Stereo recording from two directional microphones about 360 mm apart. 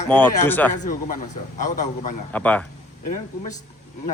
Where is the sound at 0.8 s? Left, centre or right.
Left.